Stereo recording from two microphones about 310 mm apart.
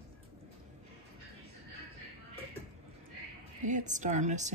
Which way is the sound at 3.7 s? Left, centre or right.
Right.